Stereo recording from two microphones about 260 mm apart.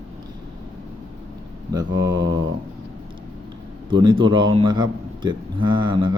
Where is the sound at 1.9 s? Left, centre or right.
Right.